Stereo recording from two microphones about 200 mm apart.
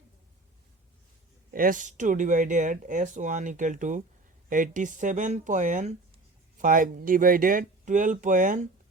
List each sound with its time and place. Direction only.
1.5 s speech: 45° right (ahead or behind)